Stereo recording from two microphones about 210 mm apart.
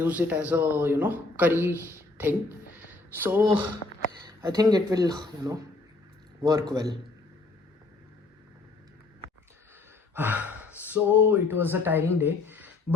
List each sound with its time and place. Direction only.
0.0 s a man's voice: 10° right (ahead or behind)
2.7 s a sound: 10° right (ahead or behind)
4.4 s a man's voice: 15° right (ahead or behind)
10.2 s speech: 10° right (ahead or behind)